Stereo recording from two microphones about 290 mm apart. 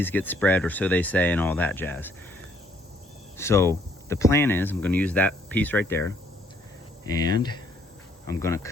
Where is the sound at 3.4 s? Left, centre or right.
Centre.